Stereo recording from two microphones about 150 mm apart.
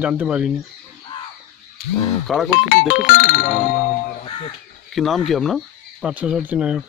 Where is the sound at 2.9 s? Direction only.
70° left (ahead or behind).